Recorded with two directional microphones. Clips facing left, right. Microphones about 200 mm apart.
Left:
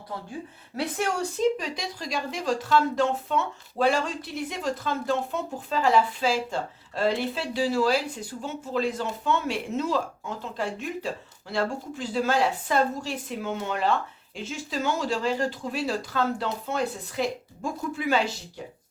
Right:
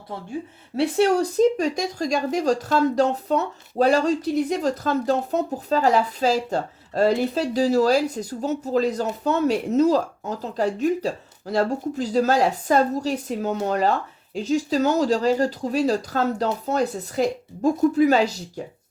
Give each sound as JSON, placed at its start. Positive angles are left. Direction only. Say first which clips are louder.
{"t": 0.8, "sound": "speech", "louder": "right 9 dB", "side_deg": -35}